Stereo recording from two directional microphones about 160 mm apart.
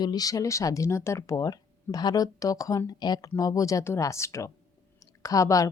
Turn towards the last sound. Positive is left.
turn(degrees=20)  # may be behind; listen again after turning